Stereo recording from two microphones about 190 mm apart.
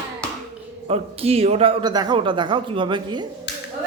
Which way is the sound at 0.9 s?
30° right (ahead or behind).